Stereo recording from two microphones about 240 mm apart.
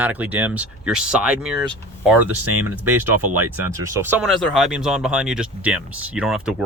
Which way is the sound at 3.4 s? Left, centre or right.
Centre.